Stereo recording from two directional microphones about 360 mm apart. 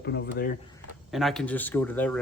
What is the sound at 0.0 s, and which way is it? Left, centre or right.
Speech, left.